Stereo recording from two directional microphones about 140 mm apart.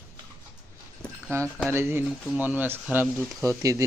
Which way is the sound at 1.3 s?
20° right (ahead or behind).